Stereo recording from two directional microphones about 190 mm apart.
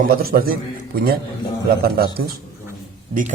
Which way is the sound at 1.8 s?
55° right (ahead or behind).